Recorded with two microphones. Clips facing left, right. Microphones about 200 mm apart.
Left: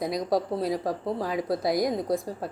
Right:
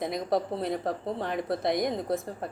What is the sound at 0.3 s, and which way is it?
A woman's voice, centre (ahead or behind).